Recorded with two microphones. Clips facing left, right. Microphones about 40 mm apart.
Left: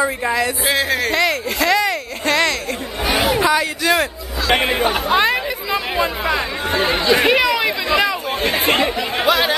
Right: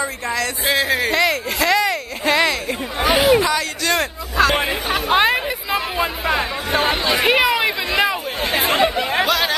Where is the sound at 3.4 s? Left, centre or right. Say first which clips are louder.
Left 3 dB; centre.